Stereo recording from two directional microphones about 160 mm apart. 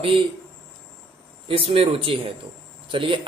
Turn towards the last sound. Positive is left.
turn(degrees=-30)  # may be behind; listen again after turning